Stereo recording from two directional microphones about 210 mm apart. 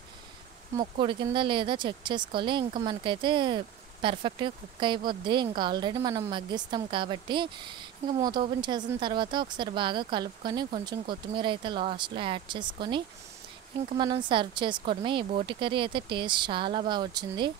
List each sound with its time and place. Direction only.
0.7 s speech: 25° right (ahead or behind)